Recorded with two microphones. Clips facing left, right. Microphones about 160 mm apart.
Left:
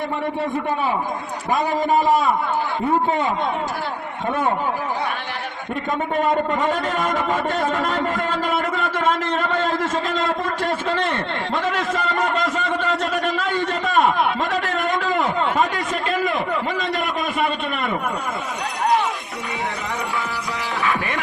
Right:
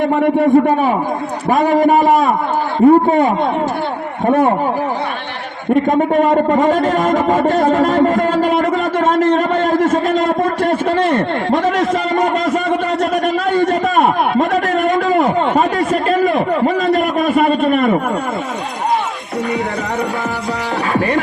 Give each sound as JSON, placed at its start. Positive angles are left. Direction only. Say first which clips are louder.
{"t": 0.0, "sound": "speech", "louder": "right 11 dB", "side_deg": -55}
{"t": 2.8, "sound": "a man's voice", "louder": "right 12 dB", "side_deg": -40}
{"t": 5.7, "sound": "a man's voice", "louder": "right 11 dB", "side_deg": -45}
{"t": 20.8, "sound": "music", "louder": "right 7 dB", "side_deg": -40}